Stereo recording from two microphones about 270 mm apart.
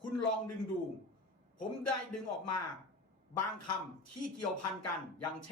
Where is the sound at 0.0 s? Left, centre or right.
Left.